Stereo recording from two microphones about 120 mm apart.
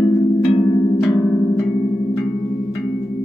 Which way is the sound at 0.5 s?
40° left (ahead or behind).